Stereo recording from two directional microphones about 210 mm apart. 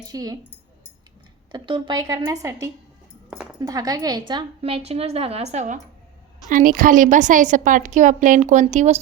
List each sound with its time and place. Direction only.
0.0 s a woman's voice: 15° right (ahead or behind)
1.5 s a woman's voice: 25° right (ahead or behind)